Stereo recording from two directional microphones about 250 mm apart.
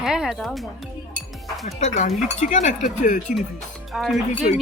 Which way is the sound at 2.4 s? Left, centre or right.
Left.